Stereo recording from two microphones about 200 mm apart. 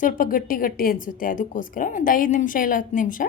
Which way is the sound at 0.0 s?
45° left (ahead or behind).